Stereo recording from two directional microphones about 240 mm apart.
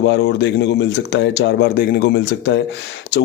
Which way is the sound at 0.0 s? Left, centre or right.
Left.